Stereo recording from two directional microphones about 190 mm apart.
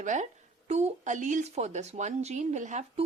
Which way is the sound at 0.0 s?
40° right (ahead or behind).